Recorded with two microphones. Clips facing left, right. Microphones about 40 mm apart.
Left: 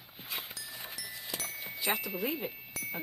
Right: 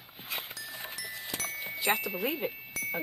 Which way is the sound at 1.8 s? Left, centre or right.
Centre.